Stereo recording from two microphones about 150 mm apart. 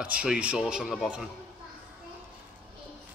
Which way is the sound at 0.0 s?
10° right (ahead or behind).